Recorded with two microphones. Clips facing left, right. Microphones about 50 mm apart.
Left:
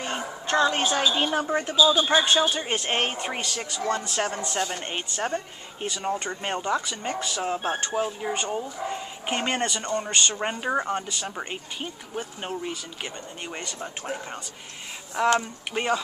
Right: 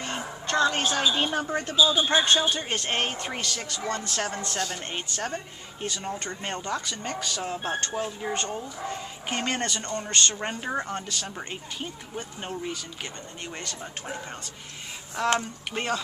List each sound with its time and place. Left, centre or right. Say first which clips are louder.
0.0 s a sound: left 2 dB; centre
1.1 s speech: left 2 dB; centre
15.1 s speech: left 3 dB; centre